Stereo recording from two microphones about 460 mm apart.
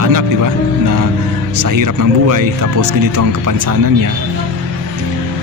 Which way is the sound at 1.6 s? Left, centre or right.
Right.